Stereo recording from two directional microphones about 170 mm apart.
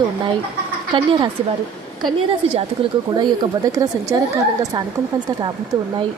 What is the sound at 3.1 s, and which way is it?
Speech, 25° right (ahead or behind).